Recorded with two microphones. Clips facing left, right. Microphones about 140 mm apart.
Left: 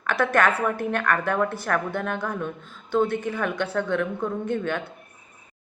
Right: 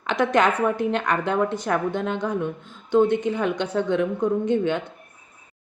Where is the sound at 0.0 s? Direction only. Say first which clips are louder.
Right 2 dB; 20° right (ahead or behind).